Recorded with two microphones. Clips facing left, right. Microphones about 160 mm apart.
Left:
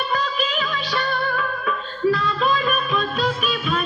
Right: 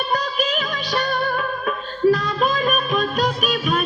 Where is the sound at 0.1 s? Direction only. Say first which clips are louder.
Right 2 dB; 40° right (ahead or behind).